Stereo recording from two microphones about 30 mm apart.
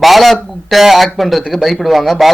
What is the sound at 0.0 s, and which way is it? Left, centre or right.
Speech, centre.